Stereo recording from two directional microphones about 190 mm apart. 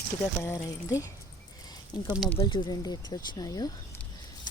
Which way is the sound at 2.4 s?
25° left (ahead or behind).